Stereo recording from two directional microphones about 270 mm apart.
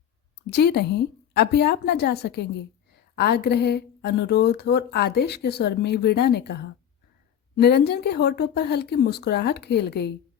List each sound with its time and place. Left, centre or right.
0.5 s speech: left